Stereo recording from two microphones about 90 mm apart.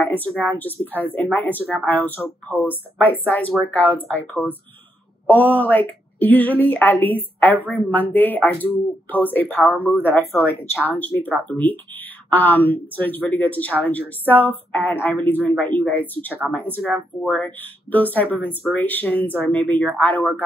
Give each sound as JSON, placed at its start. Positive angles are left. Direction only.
{"t": 0.0, "sound": "speech", "side_deg": 20}
{"t": 17.9, "sound": "speech", "side_deg": 20}